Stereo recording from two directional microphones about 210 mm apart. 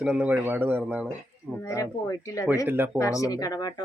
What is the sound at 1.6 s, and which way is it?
Speech, 15° left (ahead or behind).